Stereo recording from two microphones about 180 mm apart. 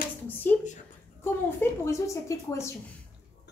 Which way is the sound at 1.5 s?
15° left (ahead or behind).